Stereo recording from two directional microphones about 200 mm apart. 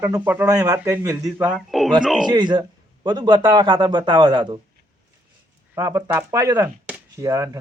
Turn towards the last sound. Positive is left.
turn(degrees=-15)  # may be behind; listen again after turning